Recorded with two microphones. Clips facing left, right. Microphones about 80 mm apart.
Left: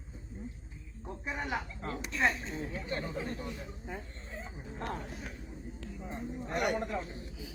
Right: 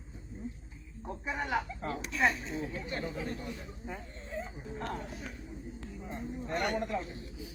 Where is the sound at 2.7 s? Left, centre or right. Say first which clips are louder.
Even; left.